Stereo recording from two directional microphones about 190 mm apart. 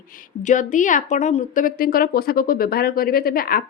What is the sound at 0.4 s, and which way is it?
A woman's voice, 40° left (ahead or behind).